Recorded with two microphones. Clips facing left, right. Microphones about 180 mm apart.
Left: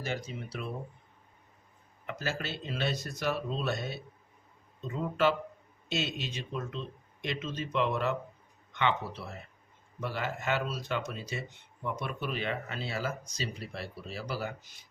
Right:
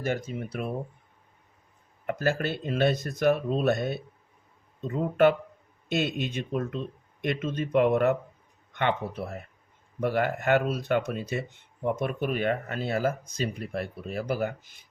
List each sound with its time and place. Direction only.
0.0 s speech: 50° right (ahead or behind)
2.0 s speech: 55° right (ahead or behind)